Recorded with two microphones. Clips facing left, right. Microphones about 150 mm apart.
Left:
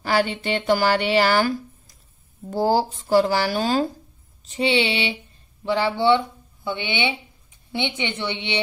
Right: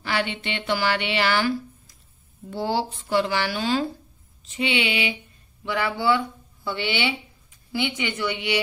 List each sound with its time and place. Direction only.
0.0 s speech: 40° left (ahead or behind)
2.5 s a woman's voice: 40° left (ahead or behind)